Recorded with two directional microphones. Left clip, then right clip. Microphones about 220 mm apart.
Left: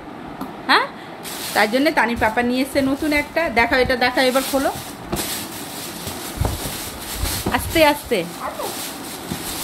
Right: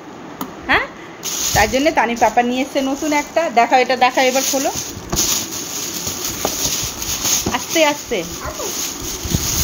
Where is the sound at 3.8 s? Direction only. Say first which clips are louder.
Right 3 dB; 65° left (ahead or behind).